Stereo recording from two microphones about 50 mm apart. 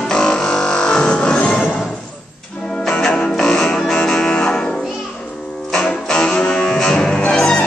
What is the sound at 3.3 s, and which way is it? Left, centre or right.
Music, centre.